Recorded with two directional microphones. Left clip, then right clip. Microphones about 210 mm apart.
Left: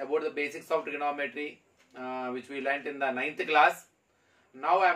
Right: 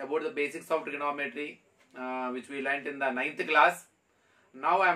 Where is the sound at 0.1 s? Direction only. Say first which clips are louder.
Even; 15° right (ahead or behind).